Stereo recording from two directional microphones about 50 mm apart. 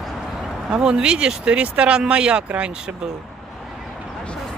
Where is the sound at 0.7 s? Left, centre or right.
Centre.